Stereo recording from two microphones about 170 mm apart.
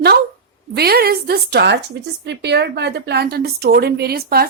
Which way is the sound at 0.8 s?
65° right (ahead or behind).